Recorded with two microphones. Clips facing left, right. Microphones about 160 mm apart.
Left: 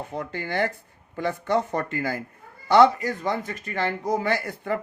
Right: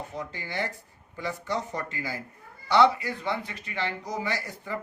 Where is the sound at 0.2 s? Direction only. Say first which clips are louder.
Left 7 dB; 55° left (ahead or behind).